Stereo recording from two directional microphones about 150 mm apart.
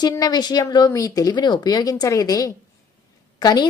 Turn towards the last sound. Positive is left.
turn(degrees=25)  # may be behind; listen again after turning